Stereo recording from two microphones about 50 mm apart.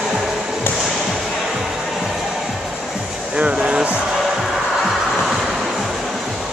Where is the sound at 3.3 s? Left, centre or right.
Right.